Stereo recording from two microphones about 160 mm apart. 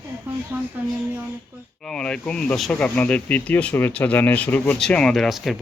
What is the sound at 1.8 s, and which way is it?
Speech, 5° left (ahead or behind).